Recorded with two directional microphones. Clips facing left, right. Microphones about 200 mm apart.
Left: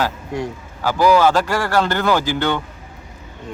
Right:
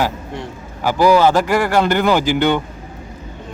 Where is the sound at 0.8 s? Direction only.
15° right (ahead or behind).